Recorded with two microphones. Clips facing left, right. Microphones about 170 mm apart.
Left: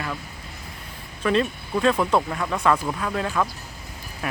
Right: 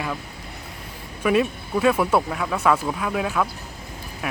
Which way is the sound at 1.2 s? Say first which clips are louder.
Right 2 dB; 10° right (ahead or behind).